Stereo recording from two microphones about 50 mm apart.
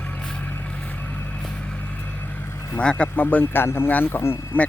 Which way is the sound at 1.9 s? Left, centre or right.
Left.